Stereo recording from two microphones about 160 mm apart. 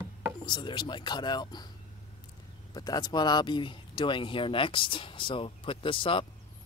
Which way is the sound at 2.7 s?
25° left (ahead or behind).